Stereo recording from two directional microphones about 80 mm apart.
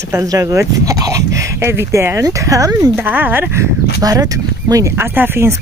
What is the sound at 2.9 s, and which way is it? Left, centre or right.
Speech, right.